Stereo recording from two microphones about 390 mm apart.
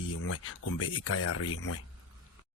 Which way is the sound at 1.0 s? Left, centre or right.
Left.